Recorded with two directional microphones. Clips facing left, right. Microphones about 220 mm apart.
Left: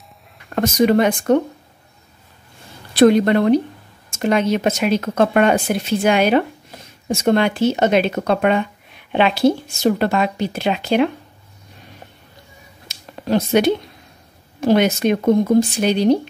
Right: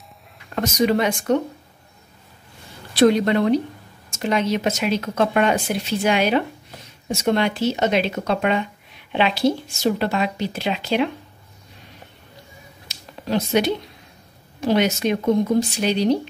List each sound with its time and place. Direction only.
0.6 s speech: 50° left (ahead or behind)
3.0 s speech: 55° left (ahead or behind)
12.8 s a sound: 50° left (ahead or behind)
14.6 s speech: 50° left (ahead or behind)